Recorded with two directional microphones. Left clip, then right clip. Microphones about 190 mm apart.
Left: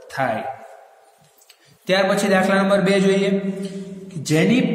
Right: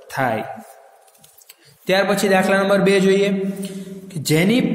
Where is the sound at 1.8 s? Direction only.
35° right (ahead or behind).